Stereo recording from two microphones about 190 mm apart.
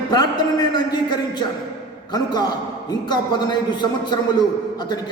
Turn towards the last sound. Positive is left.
turn(degrees=20)  # may be behind; listen again after turning